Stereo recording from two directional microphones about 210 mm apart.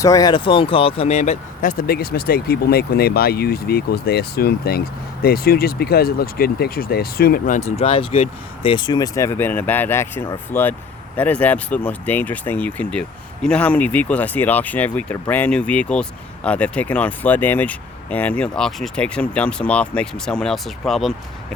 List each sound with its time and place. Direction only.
0.0 s speech: 15° left (ahead or behind); by 21.1 s centre (ahead or behind)